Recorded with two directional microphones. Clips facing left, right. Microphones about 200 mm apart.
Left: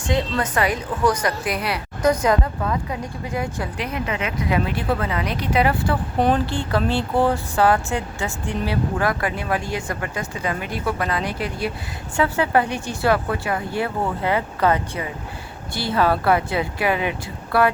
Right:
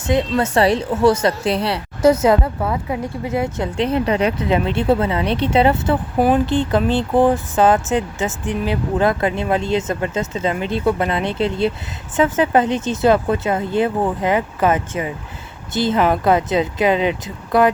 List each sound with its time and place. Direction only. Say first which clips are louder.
0.1 s speech: right 5 dB; 25° right (ahead or behind)
6.1 s speech: right 4 dB; 5° right (ahead or behind)
6.4 s speech: right 5 dB; 20° right (ahead or behind)